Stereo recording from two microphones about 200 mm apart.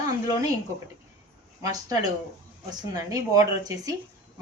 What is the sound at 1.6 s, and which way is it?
Speech, 15° right (ahead or behind).